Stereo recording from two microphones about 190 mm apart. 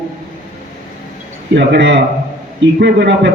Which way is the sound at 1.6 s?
65° right (ahead or behind).